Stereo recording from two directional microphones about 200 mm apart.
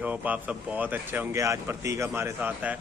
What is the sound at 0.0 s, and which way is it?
A man's voice, 5° right (ahead or behind).